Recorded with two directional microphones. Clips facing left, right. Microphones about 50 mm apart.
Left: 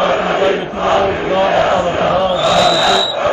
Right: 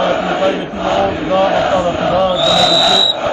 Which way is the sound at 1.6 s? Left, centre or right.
Left.